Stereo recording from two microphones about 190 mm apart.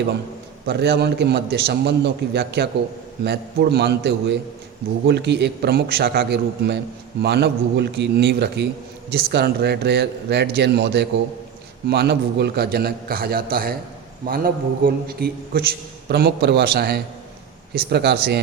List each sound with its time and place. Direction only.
0.7 s a man's voice: 60° right (ahead or behind)